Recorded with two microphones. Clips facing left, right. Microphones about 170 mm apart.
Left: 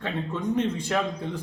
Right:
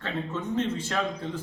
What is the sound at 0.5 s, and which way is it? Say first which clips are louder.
Speech: left 2 dB; 15° left (ahead or behind).